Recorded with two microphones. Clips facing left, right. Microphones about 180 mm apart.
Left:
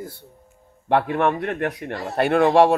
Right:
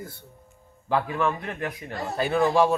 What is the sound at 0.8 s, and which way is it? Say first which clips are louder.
A man's voice: left 5 dB; 65° left (ahead or behind).